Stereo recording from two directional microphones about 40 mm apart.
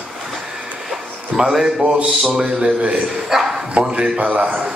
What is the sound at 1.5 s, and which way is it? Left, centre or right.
Speech, centre.